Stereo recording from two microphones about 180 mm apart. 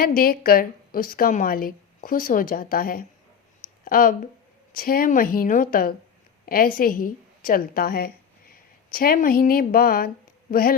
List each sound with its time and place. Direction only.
0.0 s a woman's voice: 55° left (ahead or behind)
6.4 s a sound: 55° left (ahead or behind)
6.7 s a woman's voice: 50° left (ahead or behind)